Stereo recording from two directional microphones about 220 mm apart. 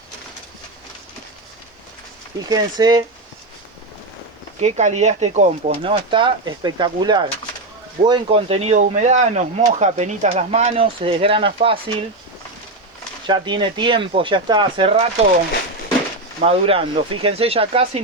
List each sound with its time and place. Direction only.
2.5 s speech: 20° right (ahead or behind)
4.6 s speech: 30° right (ahead or behind)
13.2 s speech: 20° right (ahead or behind)
16.4 s speech: 25° right (ahead or behind)